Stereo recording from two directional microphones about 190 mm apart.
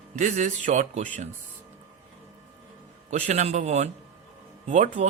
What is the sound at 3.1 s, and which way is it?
A man's voice, 35° right (ahead or behind).